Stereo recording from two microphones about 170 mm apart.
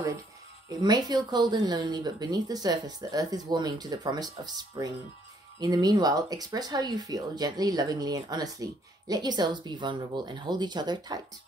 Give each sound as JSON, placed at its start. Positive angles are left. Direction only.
{"t": 0.7, "sound": "speech", "side_deg": -25}